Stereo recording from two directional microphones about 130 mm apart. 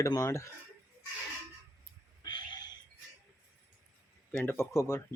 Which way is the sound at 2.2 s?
35° left (ahead or behind).